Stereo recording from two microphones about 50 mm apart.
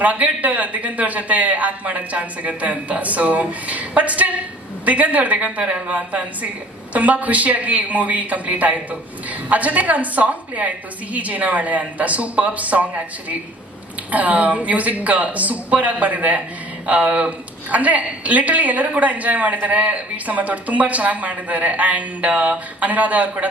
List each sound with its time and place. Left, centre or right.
0.0 s a man's voice: right
14.1 s a woman's voice: right